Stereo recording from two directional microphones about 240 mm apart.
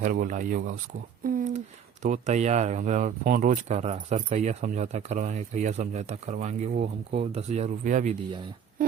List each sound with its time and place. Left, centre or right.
0.0 s speech: right